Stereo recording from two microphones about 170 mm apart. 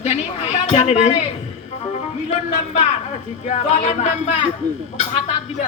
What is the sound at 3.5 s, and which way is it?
Speech, 45° left (ahead or behind).